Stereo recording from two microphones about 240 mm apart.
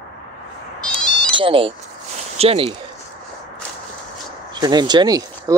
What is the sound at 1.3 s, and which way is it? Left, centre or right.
Speech, right.